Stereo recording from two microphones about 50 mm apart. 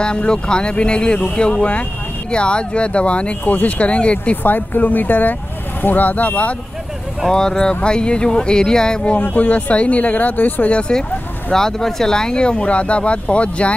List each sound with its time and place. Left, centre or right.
0.0 s speech: centre
4.4 s speech: left
7.2 s speech: centre
9.3 s speech: left
10.7 s speech: centre